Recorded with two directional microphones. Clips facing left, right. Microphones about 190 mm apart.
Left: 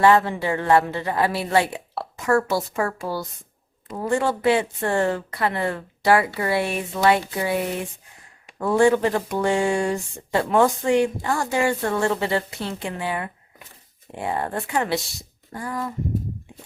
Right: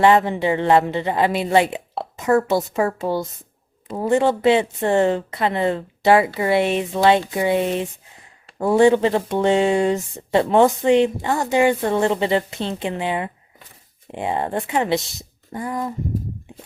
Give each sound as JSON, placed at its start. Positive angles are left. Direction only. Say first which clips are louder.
{"t": 0.0, "sound": "speech", "louder": "right 2 dB", "side_deg": -20}